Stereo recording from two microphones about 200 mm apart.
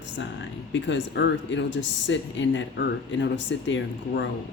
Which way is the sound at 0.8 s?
60° left (ahead or behind).